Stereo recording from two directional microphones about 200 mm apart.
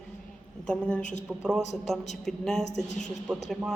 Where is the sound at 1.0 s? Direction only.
40° left (ahead or behind).